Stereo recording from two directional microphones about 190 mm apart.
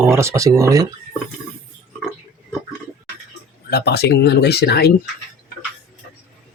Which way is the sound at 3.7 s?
60° left (ahead or behind).